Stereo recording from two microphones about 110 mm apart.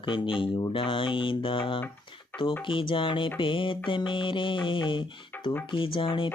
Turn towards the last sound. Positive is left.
turn(degrees=50)  # may be behind; listen again after turning